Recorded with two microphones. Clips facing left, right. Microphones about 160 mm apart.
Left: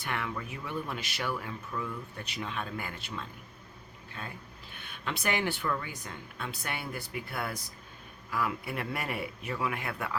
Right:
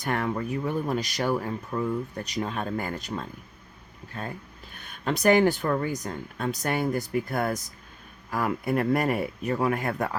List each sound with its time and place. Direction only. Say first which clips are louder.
0.0 s speech: right 8 dB; 40° right (ahead or behind)